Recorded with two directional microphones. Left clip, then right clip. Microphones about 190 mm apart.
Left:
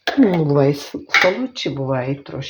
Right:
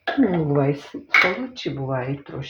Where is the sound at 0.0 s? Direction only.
50° left (ahead or behind).